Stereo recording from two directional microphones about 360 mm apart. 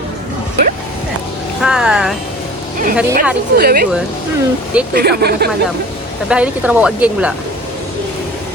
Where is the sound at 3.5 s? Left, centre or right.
Right.